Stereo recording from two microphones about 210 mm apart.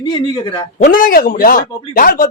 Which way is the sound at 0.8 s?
40° left (ahead or behind).